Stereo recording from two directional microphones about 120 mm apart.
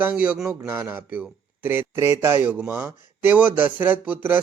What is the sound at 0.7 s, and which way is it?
Speech, 15° right (ahead or behind).